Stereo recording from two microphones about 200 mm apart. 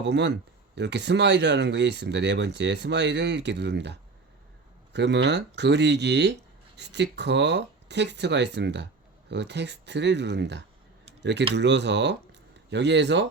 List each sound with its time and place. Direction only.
0.0 s speech: 60° right (ahead or behind)
4.9 s speech: 60° right (ahead or behind)